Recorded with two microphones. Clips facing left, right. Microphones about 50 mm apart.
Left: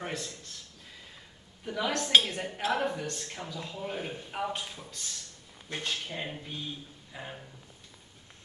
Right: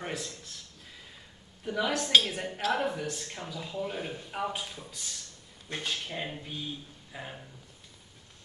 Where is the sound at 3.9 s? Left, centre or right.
Centre.